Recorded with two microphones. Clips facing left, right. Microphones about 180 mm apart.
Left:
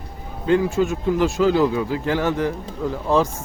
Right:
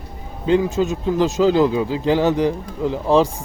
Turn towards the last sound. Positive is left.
turn(degrees=-20)  # may be behind; listen again after turning